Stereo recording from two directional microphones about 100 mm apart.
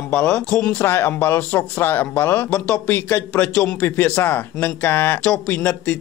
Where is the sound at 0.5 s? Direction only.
10° left (ahead or behind).